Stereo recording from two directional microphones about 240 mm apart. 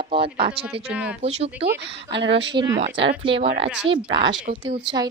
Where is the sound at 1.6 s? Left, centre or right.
Right.